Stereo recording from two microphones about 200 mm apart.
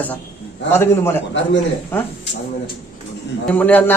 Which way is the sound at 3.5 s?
10° left (ahead or behind).